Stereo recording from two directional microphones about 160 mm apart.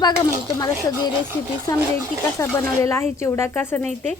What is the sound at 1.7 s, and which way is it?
A woman's voice, 20° left (ahead or behind).